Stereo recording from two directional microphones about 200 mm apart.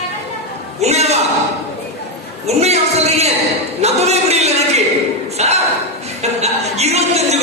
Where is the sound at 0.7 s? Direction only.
35° right (ahead or behind).